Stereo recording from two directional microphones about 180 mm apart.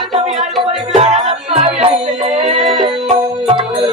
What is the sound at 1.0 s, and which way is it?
Music, 35° right (ahead or behind).